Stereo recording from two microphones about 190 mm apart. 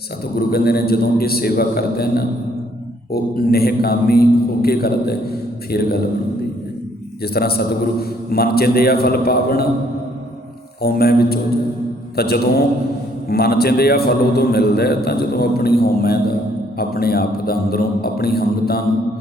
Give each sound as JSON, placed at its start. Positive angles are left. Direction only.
{"t": 0.3, "sound": "a man's voice", "side_deg": 55}
{"t": 7.3, "sound": "a man's voice", "side_deg": 55}
{"t": 10.8, "sound": "a man's voice", "side_deg": 55}